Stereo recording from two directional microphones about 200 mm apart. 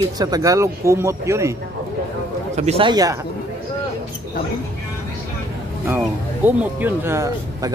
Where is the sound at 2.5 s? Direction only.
30° right (ahead or behind).